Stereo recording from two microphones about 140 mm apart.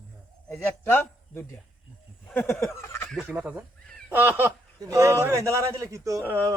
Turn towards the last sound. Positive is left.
turn(degrees=-25)  # may be behind; listen again after turning